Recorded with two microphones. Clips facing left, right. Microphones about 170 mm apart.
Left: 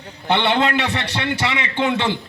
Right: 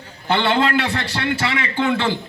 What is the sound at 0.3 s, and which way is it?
A man's voice, 20° left (ahead or behind).